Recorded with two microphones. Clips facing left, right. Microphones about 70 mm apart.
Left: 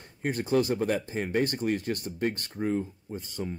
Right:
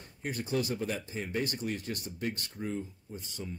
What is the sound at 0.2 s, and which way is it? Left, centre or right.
Speech, left.